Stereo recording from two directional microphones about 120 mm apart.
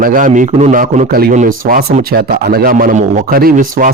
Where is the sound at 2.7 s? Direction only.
90° right.